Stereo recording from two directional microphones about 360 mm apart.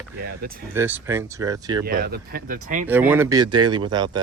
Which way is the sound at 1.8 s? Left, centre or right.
Right.